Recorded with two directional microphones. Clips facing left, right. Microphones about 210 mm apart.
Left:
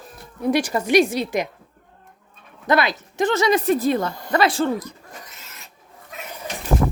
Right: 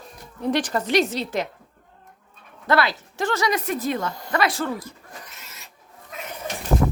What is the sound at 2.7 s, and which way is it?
Speech, 20° left (ahead or behind).